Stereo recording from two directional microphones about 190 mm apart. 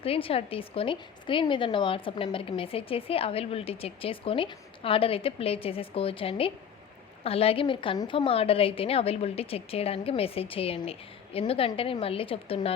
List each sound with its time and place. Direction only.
0.0 s a woman's voice: 30° left (ahead or behind)